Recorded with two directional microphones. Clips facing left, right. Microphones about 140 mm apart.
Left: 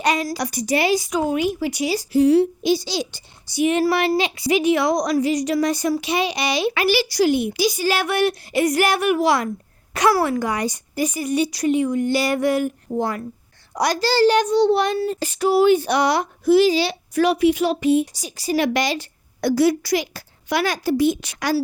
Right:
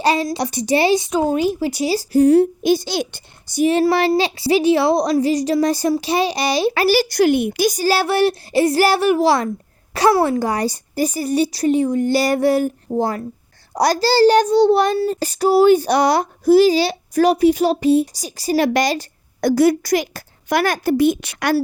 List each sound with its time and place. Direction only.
0.0 s a woman's voice: 30° right (ahead or behind)
2.2 s a woman's voice: 50° right (ahead or behind)
3.7 s a child's voice: 30° right (ahead or behind); by 21.6 s 60° right (ahead or behind)